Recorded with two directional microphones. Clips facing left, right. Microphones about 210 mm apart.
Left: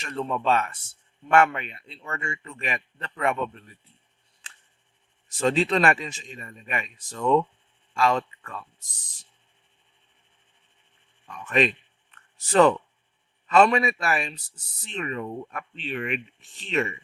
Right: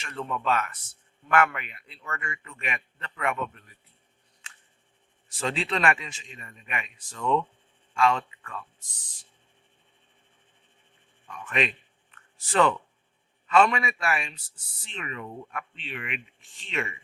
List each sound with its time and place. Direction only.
0.0 s a man's voice: 35° left (ahead or behind)
5.3 s speech: 40° left (ahead or behind)
11.4 s speech: 40° left (ahead or behind)